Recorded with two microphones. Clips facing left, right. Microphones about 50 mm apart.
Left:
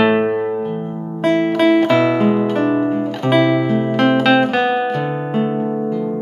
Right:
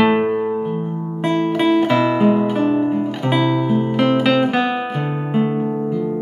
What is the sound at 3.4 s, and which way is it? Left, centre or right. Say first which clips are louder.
Music: left 3 dB; left.